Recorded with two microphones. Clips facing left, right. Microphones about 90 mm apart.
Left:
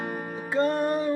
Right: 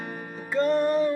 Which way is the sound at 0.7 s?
5° left (ahead or behind).